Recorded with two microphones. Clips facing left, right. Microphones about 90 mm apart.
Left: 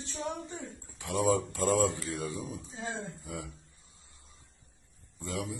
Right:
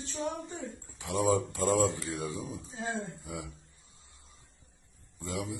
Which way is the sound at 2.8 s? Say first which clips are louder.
Right 3 dB; 30° right (ahead or behind).